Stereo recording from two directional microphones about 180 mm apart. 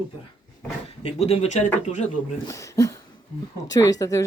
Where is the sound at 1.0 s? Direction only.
35° left (ahead or behind).